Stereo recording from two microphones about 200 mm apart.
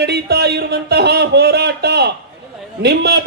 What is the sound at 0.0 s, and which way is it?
Speech, 55° right (ahead or behind).